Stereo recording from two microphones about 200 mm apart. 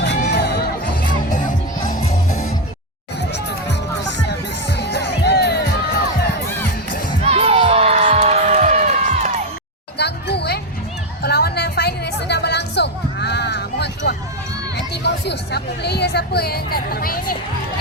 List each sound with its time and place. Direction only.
0.0 s music: 55° left (ahead or behind)
1.3 s music: 40° left (ahead or behind)
3.2 s music: 60° left (ahead or behind)
4.8 s music: 55° left (ahead or behind)
7.3 s music: 30° right (ahead or behind)
10.0 s music: 55° left (ahead or behind)
11.2 s a sound: 50° left (ahead or behind)